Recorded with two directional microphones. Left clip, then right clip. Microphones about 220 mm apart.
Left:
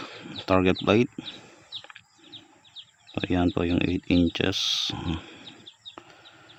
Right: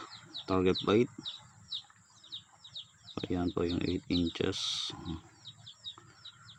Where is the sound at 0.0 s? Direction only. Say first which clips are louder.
Left 7 dB; 40° left (ahead or behind).